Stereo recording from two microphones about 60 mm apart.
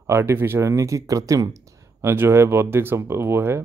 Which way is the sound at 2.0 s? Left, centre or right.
Right.